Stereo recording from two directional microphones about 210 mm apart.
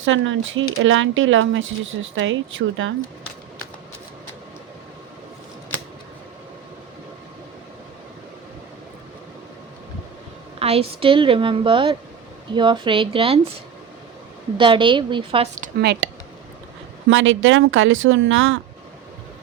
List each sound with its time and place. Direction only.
0.0 s speech: 65° right (ahead or behind)
10.6 s a woman's voice: 30° right (ahead or behind)
14.6 s a woman's voice: 25° right (ahead or behind)
15.8 s speech: 50° right (ahead or behind)
17.1 s speech: 65° right (ahead or behind)